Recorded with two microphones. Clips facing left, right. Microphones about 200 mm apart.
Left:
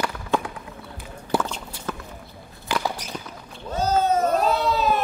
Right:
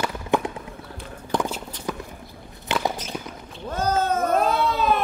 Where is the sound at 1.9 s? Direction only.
10° right (ahead or behind).